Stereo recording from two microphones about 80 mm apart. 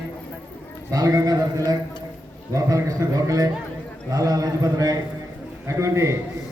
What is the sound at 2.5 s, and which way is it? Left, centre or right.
A man's voice, right.